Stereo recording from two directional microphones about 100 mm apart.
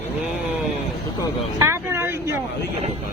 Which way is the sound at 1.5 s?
30° right (ahead or behind).